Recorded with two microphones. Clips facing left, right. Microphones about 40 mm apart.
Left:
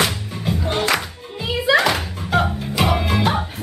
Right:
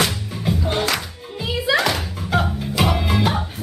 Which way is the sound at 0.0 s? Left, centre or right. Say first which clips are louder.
Even; centre.